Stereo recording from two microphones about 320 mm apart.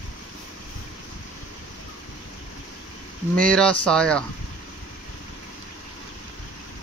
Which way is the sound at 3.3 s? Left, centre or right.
Centre.